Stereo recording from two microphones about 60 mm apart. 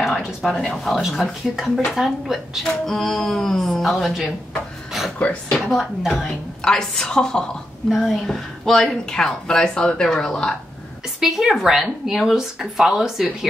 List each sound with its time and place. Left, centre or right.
0.0 s a sound: centre
0.4 s speech: centre
2.6 s speech: centre
5.2 s speech: left
5.7 s speech: centre
6.6 s speech: centre
7.9 s speech: centre
8.3 s speech: centre
11.1 s speech: centre